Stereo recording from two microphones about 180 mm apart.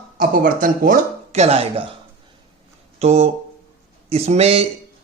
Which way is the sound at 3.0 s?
35° right (ahead or behind).